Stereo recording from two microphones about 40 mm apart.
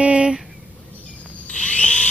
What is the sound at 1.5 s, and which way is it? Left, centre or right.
Drill, left.